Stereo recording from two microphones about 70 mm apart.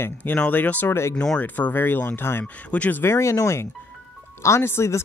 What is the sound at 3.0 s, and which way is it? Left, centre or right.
Speech, left.